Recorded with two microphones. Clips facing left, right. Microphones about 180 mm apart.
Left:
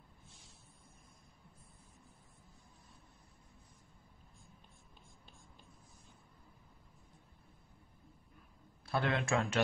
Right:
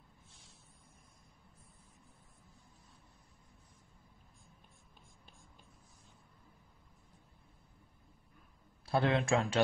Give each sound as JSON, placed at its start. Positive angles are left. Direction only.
{"t": 8.8, "sound": "a man's voice", "side_deg": -30}